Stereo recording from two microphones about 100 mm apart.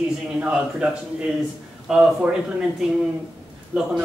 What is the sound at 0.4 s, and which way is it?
Speech, 10° right (ahead or behind).